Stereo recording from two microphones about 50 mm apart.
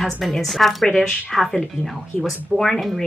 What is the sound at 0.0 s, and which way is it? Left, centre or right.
Speech, centre.